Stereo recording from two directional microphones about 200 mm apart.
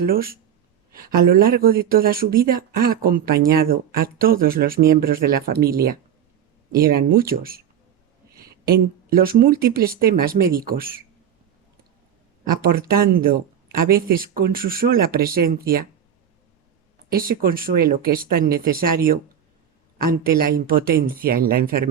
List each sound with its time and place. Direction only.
0.0 s speech: 50° right (ahead or behind)
6.7 s speech: 50° right (ahead or behind)
12.6 s speech: 45° right (ahead or behind)
17.1 s speech: 45° right (ahead or behind)
20.7 s speech: 45° right (ahead or behind)